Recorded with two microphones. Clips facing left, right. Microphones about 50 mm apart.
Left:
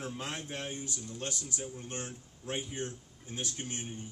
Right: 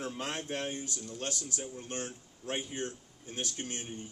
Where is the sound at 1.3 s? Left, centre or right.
Left.